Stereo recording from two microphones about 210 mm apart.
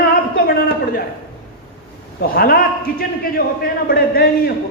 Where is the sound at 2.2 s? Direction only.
45° left (ahead or behind).